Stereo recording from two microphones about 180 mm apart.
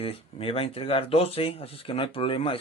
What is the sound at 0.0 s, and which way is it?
Speech, 30° left (ahead or behind).